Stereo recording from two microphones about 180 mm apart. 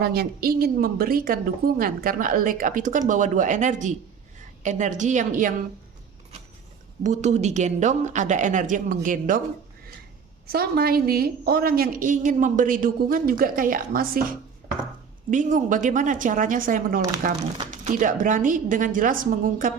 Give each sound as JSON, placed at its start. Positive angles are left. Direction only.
{"t": 0.0, "sound": "a woman's voice", "side_deg": -60}
{"t": 7.0, "sound": "a woman's voice", "side_deg": -40}
{"t": 10.4, "sound": "a woman's voice", "side_deg": -60}
{"t": 18.0, "sound": "a woman's voice", "side_deg": -50}